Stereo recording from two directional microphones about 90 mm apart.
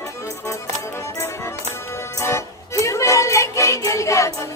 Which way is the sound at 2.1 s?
35° left (ahead or behind).